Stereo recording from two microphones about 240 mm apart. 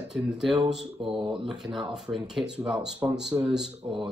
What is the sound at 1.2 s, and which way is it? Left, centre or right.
Speech, right.